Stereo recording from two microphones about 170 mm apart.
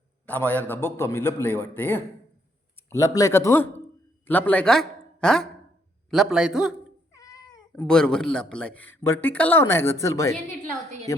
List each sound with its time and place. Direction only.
0.3 s a man's voice: 10° left (ahead or behind)
7.1 s cat: 20° left (ahead or behind)
7.8 s speech: 5° left (ahead or behind)